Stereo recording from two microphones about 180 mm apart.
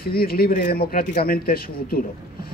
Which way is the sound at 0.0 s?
55° left (ahead or behind).